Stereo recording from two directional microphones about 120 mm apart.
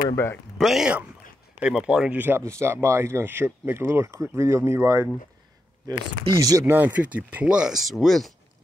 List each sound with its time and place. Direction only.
0.1 s speech: 20° left (ahead or behind)
0.6 s speech: centre (ahead or behind); by 5.1 s 20° right (ahead or behind)
5.9 s speech: 30° right (ahead or behind)
6.6 s speech: 15° right (ahead or behind); by 8.3 s centre (ahead or behind)